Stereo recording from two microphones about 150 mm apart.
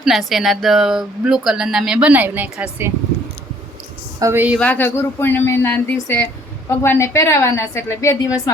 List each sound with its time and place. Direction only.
0.0 s speech: centre (ahead or behind)
4.2 s a woman's voice: 15° right (ahead or behind)
4.6 s a woman's voice: 15° left (ahead or behind)